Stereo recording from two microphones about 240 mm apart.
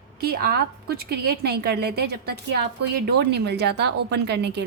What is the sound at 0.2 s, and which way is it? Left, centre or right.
A woman's voice, right.